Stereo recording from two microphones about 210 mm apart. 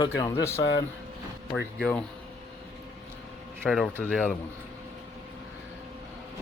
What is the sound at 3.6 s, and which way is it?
Speech, centre (ahead or behind).